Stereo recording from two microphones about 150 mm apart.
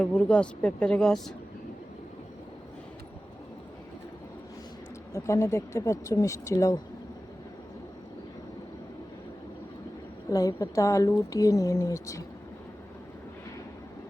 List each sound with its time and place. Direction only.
0.0 s speech: 10° left (ahead or behind)
5.1 s speech: 20° left (ahead or behind)
10.2 s speech: 20° left (ahead or behind)